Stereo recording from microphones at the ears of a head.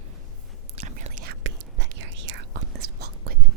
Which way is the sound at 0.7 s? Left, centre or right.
Right.